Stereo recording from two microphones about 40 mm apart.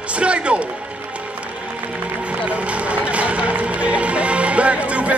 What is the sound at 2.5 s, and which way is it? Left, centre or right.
Music, right.